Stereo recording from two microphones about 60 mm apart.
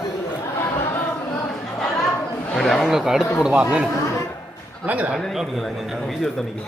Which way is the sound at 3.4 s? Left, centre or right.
Centre.